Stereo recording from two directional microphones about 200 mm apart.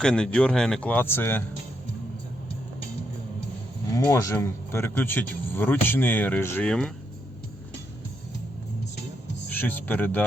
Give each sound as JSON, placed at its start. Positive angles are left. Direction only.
{"t": 0.0, "sound": "a man's voice", "side_deg": 5}
{"t": 3.9, "sound": "speech", "side_deg": 15}
{"t": 9.5, "sound": "speech", "side_deg": 10}